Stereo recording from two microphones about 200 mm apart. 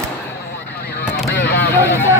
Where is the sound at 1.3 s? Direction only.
55° left (ahead or behind).